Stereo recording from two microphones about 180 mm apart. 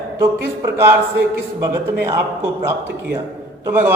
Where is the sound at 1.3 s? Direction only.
15° right (ahead or behind).